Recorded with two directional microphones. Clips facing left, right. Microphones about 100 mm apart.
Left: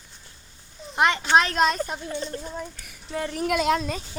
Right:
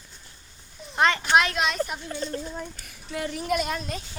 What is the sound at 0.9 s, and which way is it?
Speech, 20° left (ahead or behind).